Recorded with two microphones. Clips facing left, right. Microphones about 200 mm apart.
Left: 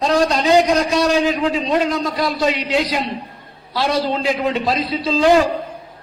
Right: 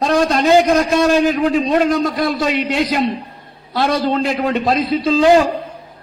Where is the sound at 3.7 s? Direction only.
50° right (ahead or behind).